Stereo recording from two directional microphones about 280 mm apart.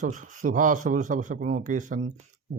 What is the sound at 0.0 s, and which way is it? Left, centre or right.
Speech, right.